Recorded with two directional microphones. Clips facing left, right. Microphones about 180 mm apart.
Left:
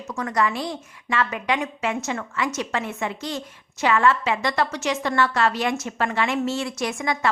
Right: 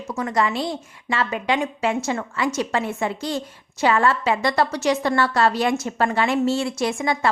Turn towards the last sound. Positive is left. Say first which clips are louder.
# right 3 dB
turn(degrees=-30)  # may be behind; listen again after turning